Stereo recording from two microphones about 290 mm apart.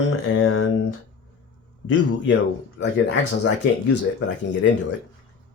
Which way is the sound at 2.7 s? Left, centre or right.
Left.